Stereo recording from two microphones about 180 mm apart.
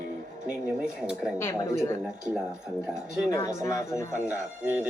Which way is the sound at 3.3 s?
15° left (ahead or behind).